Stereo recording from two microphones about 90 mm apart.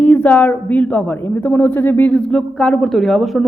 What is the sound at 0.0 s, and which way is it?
A woman's voice, 20° left (ahead or behind).